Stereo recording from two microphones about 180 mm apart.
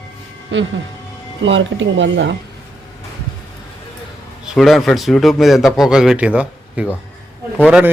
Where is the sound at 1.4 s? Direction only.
90° right.